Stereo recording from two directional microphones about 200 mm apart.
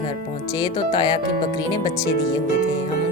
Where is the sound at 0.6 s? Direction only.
20° left (ahead or behind).